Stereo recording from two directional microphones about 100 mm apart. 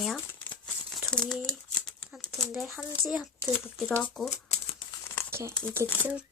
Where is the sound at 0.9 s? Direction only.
5° left (ahead or behind).